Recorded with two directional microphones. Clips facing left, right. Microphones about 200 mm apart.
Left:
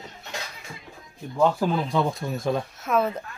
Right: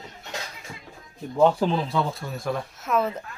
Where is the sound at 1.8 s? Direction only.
15° left (ahead or behind).